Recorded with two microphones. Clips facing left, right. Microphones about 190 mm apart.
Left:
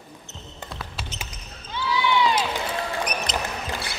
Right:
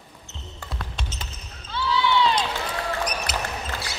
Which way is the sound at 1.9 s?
10° left (ahead or behind).